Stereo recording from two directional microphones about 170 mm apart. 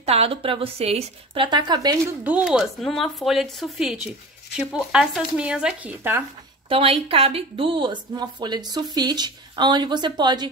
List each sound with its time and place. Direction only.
0.0 s a woman's voice: 35° right (ahead or behind)
2.2 s speech: 5° right (ahead or behind)
6.7 s a woman's voice: 35° right (ahead or behind)